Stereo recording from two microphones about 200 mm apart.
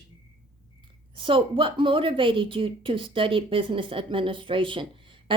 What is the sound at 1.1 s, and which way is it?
A woman's voice, 25° right (ahead or behind).